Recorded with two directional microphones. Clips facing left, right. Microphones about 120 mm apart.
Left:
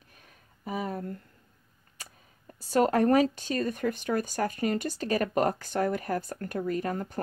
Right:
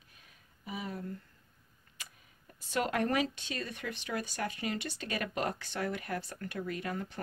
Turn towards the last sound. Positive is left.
turn(degrees=40)  # may be behind; listen again after turning